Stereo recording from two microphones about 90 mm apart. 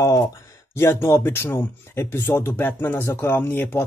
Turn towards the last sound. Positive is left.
turn(degrees=25)  # may be behind; listen again after turning